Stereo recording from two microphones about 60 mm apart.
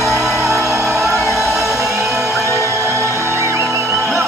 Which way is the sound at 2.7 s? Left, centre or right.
Right.